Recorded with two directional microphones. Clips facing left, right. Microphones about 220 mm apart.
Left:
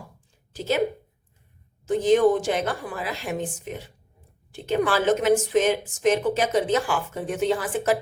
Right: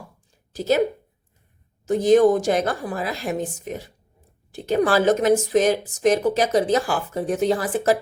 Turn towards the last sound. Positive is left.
turn(degrees=-35)  # may be behind; listen again after turning